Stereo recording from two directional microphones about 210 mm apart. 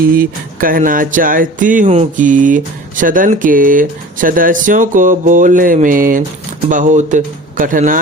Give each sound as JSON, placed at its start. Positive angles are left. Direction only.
{"t": 0.0, "sound": "music", "side_deg": -45}